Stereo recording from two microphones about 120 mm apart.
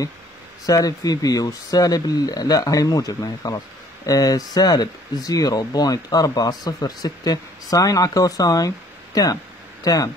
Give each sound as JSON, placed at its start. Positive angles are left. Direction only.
{"t": 0.7, "sound": "speech", "side_deg": 30}